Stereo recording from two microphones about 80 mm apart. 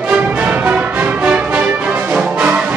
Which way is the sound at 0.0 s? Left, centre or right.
Centre.